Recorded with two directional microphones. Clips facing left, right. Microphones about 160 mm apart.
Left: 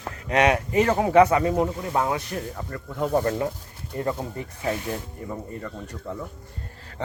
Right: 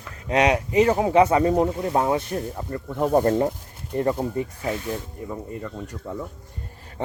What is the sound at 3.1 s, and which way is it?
Speech, 35° right (ahead or behind).